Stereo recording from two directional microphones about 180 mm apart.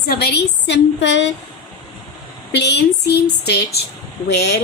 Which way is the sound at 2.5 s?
70° left (ahead or behind).